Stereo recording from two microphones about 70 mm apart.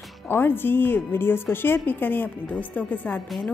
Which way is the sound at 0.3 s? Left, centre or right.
Left.